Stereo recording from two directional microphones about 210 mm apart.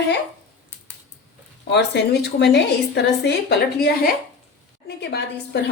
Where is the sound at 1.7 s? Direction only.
55° left (ahead or behind).